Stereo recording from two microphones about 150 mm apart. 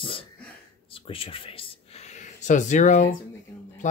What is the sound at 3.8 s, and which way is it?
Speech, 55° left (ahead or behind).